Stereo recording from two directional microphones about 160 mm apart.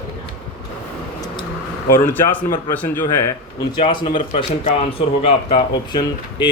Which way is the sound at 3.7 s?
30° left (ahead or behind).